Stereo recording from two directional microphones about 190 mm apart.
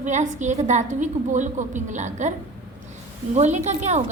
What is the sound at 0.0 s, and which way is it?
A woman's voice, 40° right (ahead or behind).